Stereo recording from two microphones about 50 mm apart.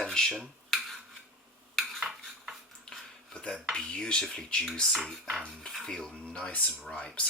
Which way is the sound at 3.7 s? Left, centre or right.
Centre.